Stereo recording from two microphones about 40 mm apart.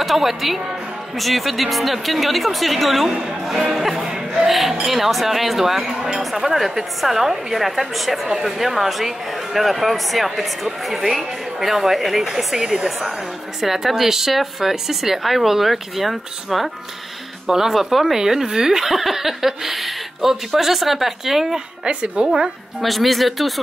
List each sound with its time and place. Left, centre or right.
0.0 s a woman's voice: centre
21.8 s a woman's voice: right
22.8 s a woman's voice: centre